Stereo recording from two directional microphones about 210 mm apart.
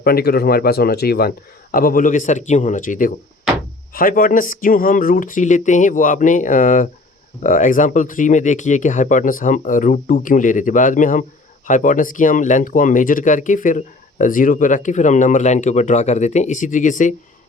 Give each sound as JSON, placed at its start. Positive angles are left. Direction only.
{"t": 0.0, "sound": "speech", "side_deg": 45}